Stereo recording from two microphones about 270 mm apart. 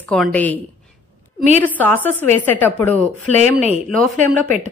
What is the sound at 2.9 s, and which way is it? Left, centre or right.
Speech, right.